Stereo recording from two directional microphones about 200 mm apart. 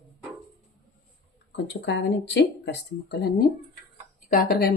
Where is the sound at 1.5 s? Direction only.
60° left (ahead or behind).